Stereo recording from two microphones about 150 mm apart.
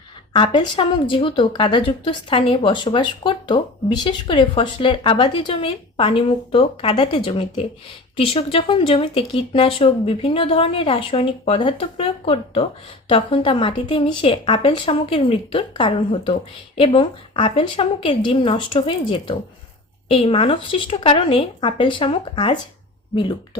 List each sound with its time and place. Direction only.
0.3 s a woman's voice: 30° left (ahead or behind)